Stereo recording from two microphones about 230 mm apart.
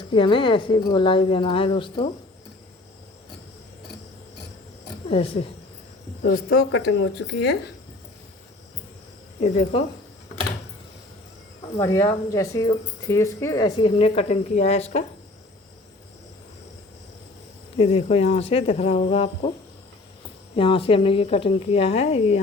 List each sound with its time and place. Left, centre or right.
0.0 s speech: left
5.0 s speech: left
6.2 s speech: left
6.7 s speech: left
9.4 s speech: left
11.8 s speech: centre; by 15.0 s left
17.7 s speech: left
20.6 s speech: left